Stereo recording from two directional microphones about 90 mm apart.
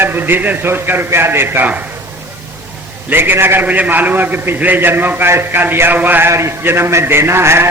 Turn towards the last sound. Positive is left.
turn(degrees=-30)  # may be behind; listen again after turning